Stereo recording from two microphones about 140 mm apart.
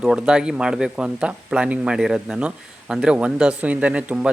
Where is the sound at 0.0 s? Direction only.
5° right (ahead or behind).